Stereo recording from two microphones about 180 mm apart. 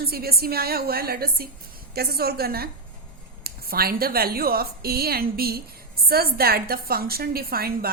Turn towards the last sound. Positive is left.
turn(degrees=-55)  # may be behind; listen again after turning